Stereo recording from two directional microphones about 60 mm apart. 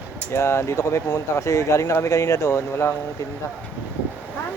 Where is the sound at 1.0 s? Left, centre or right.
Left.